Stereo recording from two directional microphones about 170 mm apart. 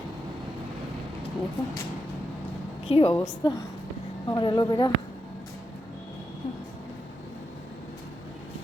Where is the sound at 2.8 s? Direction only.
35° left (ahead or behind).